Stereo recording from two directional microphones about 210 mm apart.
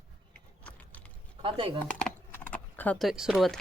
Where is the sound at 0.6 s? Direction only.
5° left (ahead or behind).